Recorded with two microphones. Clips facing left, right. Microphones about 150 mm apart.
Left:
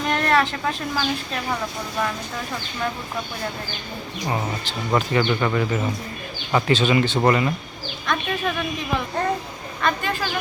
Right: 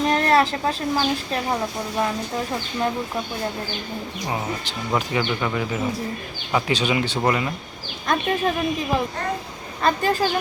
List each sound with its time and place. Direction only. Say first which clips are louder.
0.0 s a woman's voice: right 2 dB; 35° right (ahead or behind)
4.9 s speech: left 3 dB; 5° right (ahead or behind)
7.2 s speech: left 3 dB; centre (ahead or behind)
8.0 s a woman's voice: right 3 dB; 35° right (ahead or behind)